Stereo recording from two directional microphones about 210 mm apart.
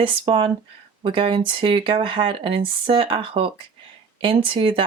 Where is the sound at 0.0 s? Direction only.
25° right (ahead or behind).